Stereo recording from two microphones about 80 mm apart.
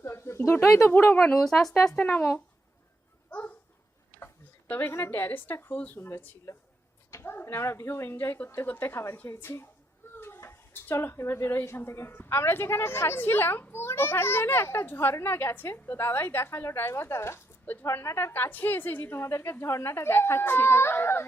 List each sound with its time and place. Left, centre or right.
0.0 s a sound: left
0.8 s a woman's voice: left
1.5 s speech: centre
2.0 s a woman's voice: left
3.2 s a sound: centre
4.7 s a woman's voice: left
6.0 s a woman's voice: left